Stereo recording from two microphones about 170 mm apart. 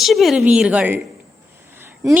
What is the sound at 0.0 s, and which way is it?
Speech, centre (ahead or behind).